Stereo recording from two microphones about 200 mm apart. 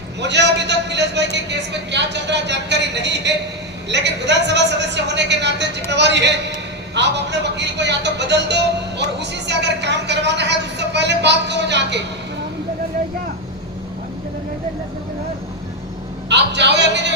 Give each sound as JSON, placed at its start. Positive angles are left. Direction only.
{"t": 0.2, "sound": "a man's voice", "side_deg": -60}
{"t": 16.3, "sound": "a man's voice", "side_deg": -60}